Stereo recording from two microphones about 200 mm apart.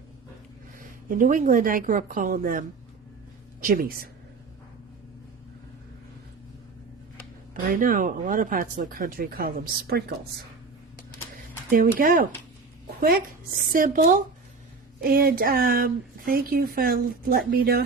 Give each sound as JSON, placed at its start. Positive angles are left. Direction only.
{"t": 1.0, "sound": "speech", "side_deg": -40}
{"t": 7.5, "sound": "speech", "side_deg": -45}
{"t": 11.9, "sound": "speech", "side_deg": -45}